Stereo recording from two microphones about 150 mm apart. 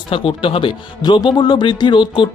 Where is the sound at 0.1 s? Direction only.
35° left (ahead or behind).